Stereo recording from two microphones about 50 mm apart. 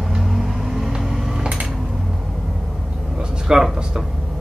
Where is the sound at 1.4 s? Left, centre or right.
Right.